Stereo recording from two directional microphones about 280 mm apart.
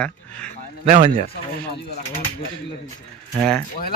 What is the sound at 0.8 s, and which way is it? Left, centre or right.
Speech, right.